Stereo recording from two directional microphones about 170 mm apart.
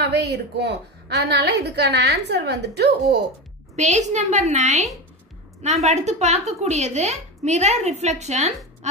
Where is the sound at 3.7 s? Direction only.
45° right (ahead or behind).